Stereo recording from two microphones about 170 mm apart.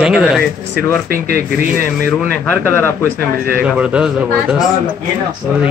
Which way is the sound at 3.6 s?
5° right (ahead or behind).